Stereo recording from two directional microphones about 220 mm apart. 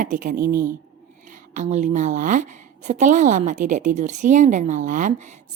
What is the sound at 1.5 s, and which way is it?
A woman's voice, 35° right (ahead or behind).